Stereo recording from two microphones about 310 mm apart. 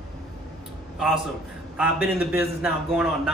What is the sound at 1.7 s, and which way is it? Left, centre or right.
A man's voice, centre.